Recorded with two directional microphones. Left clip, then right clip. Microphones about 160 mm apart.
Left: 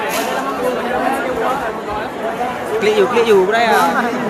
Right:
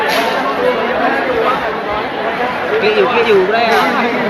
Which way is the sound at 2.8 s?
45° left (ahead or behind).